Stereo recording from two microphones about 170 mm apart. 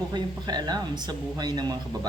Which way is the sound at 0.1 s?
25° right (ahead or behind).